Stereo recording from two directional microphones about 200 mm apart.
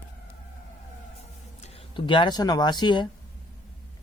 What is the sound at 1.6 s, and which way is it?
Speech, 30° left (ahead or behind).